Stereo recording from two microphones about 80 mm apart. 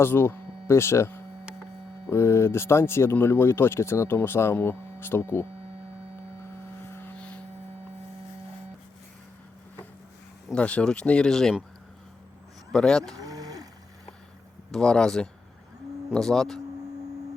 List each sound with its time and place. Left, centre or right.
0.0 s speech: left
10.5 s speech: centre
12.7 s speech: centre
13.1 s a sound: right
14.7 s speech: centre